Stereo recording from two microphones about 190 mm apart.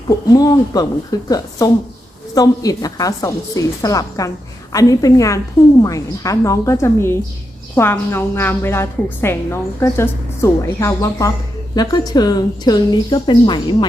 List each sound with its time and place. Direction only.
0.3 s a woman's voice: 20° left (ahead or behind)